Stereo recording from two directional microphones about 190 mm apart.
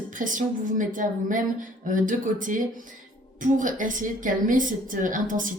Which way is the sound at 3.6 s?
45° right (ahead or behind).